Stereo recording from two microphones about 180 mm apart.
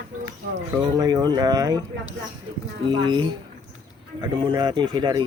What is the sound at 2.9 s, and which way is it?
Speech, 25° right (ahead or behind).